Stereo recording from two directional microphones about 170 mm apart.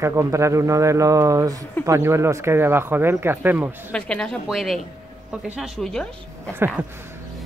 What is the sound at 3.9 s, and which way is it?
Speech, 5° left (ahead or behind).